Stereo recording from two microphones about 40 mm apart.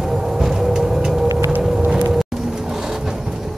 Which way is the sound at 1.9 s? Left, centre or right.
Right.